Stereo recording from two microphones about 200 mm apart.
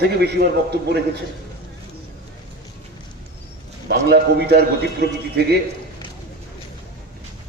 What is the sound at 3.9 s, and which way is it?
A man's voice, 55° right (ahead or behind).